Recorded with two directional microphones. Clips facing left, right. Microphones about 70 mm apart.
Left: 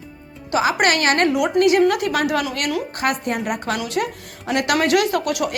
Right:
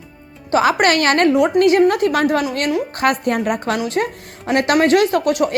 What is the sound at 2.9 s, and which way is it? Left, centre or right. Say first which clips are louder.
A woman's voice: right 5 dB; right.